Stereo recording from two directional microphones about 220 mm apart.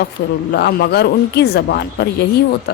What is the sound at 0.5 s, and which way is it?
Speech, 45° left (ahead or behind).